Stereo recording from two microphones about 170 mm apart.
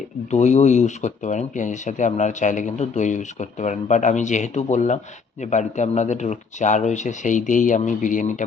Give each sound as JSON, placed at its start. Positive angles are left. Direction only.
{"t": 0.3, "sound": "speech", "side_deg": 45}